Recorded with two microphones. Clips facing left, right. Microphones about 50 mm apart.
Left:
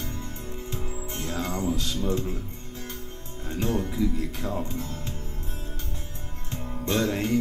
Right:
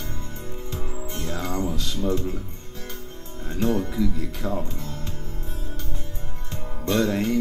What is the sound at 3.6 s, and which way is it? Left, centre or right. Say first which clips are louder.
Music: right 4 dB; centre.